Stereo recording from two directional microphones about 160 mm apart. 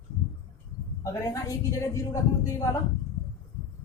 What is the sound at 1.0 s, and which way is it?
A woman's voice, 20° left (ahead or behind).